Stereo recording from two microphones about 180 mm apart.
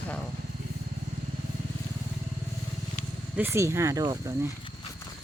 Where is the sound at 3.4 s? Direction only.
15° right (ahead or behind).